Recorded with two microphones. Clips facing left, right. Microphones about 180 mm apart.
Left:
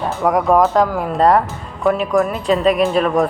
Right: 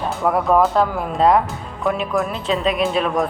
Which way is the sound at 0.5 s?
15° left (ahead or behind).